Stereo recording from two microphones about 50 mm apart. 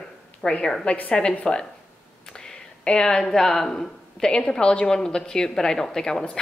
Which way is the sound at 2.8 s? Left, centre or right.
Centre.